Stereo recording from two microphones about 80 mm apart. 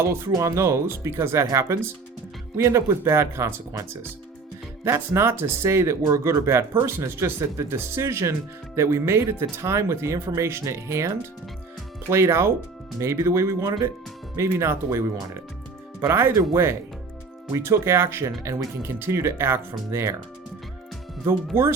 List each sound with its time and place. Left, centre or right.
0.0 s speech: right
17.5 s speech: right
21.5 s speech: right